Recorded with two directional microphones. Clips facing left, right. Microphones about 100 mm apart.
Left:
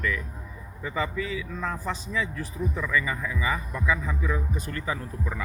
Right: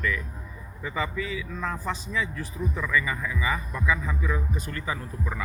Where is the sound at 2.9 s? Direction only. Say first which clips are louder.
Right 2 dB; 30° left (ahead or behind).